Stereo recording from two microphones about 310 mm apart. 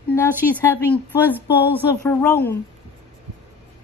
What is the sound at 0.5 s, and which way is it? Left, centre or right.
Speech, centre.